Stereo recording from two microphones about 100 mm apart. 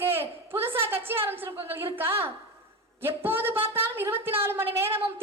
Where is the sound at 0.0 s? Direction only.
20° right (ahead or behind).